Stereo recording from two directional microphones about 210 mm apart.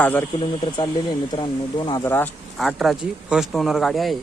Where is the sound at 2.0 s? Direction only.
10° left (ahead or behind).